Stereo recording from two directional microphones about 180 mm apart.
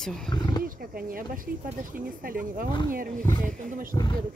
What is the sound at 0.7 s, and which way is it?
Speech, 55° right (ahead or behind).